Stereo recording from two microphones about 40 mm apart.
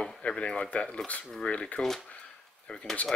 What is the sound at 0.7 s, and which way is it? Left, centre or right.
Speech, left.